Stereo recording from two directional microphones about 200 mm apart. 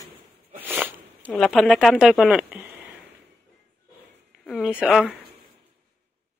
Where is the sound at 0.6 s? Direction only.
10° right (ahead or behind).